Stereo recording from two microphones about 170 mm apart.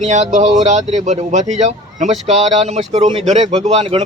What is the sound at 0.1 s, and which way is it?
Speech, 45° right (ahead or behind).